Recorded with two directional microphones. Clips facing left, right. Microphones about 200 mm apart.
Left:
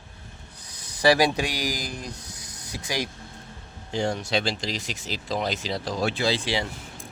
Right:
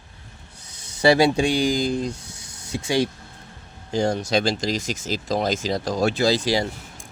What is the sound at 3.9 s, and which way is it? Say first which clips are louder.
Speech: right 5 dB; 40° right (ahead or behind).